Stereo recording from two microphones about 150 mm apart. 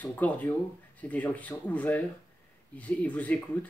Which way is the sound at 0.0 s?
10° left (ahead or behind).